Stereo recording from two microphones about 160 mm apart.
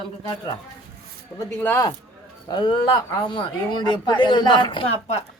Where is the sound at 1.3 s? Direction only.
15° left (ahead or behind).